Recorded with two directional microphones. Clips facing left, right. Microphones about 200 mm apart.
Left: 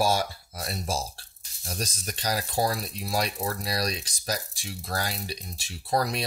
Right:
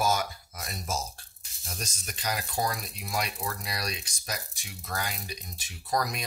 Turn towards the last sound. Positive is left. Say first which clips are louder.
# left 4 dB
turn(degrees=30)  # may be behind; listen again after turning